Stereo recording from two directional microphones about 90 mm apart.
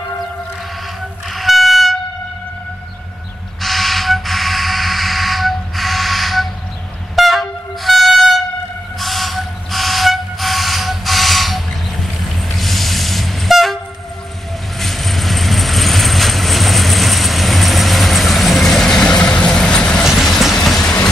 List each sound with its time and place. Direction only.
1.3 s train: centre (ahead or behind)
3.6 s a sound: centre (ahead or behind)
7.2 s train: centre (ahead or behind)
14.8 s vehicle: centre (ahead or behind)